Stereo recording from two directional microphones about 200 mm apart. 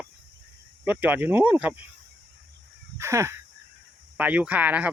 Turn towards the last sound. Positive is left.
turn(degrees=-5)  # may be behind; listen again after turning